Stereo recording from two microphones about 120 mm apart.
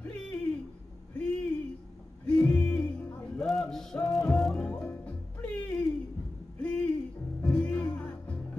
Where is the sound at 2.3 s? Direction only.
15° left (ahead or behind).